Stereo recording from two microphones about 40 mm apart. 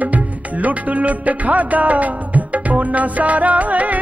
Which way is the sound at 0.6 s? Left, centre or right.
Right.